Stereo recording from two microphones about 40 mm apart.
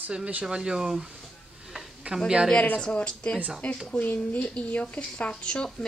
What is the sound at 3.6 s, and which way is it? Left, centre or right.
Speech, left.